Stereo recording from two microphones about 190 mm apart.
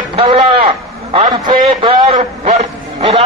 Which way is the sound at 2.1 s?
40° right (ahead or behind).